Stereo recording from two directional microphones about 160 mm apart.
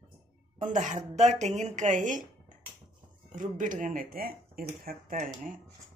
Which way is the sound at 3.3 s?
55° right (ahead or behind).